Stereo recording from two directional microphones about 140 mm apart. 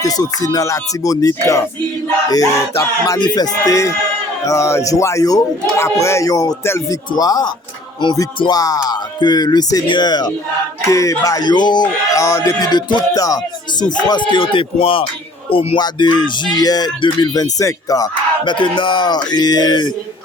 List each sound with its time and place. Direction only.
0.0 s speech: 25° left (ahead or behind)
3.1 s speech: 30° left (ahead or behind)
13.9 s music: 35° left (ahead or behind)
16.6 s speech: 30° left (ahead or behind)